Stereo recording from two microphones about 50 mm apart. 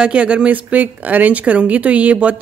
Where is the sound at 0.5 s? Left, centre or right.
Right.